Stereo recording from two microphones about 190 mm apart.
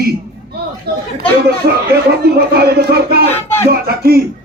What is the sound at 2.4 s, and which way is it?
Speech, 55° right (ahead or behind).